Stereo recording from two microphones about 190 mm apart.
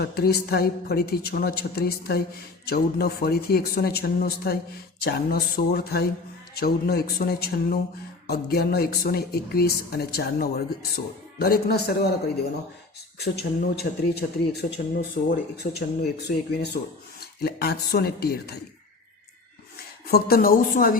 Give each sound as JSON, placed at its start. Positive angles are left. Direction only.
{"t": 0.0, "sound": "a woman's voice", "side_deg": 55}
{"t": 13.1, "sound": "a woman's voice", "side_deg": 60}
{"t": 16.2, "sound": "a woman's voice", "side_deg": 60}
{"t": 20.1, "sound": "speech", "side_deg": 55}